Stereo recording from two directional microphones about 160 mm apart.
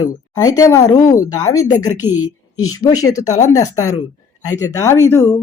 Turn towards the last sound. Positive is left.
turn(degrees=15)  # may be behind; listen again after turning